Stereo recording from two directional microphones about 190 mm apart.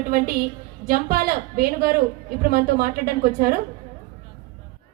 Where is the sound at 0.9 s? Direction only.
50° right (ahead or behind).